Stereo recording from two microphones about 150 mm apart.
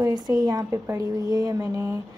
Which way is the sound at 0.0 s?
25° right (ahead or behind).